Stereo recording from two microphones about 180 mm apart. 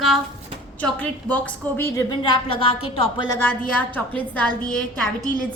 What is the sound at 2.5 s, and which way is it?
Speech, 30° left (ahead or behind).